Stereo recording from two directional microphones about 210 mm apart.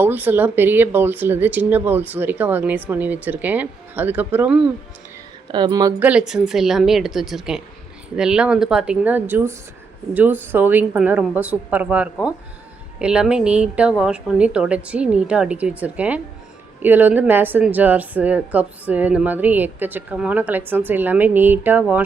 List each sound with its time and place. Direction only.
0.0 s a woman's voice: 10° right (ahead or behind)
5.5 s speech: 20° right (ahead or behind)
6.1 s a woman's voice: 5° right (ahead or behind)